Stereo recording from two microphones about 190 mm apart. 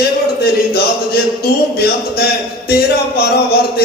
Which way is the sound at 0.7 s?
55° left (ahead or behind).